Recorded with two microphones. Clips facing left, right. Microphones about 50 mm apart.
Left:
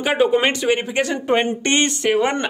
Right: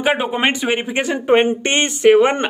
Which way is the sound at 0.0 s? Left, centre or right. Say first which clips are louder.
Left 1 dB; centre.